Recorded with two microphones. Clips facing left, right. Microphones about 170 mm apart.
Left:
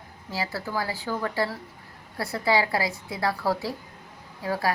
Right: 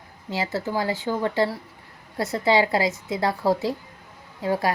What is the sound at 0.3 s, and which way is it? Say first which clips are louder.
A woman's voice: right 4 dB; 20° right (ahead or behind).